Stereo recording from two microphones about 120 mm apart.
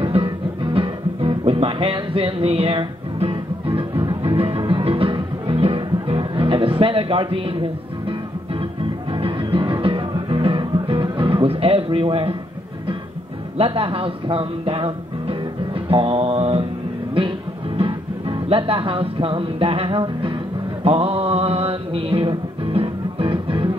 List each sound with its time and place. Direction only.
0.0 s music: 45° right (ahead or behind)
9.2 s music: 45° right (ahead or behind)
13.6 s speech: 50° right (ahead or behind)
15.9 s mantra: 50° right (ahead or behind)
17.7 s speech: 45° right (ahead or behind)
20.8 s music: 50° right (ahead or behind)